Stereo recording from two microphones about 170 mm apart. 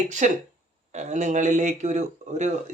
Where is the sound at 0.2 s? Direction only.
45° right (ahead or behind).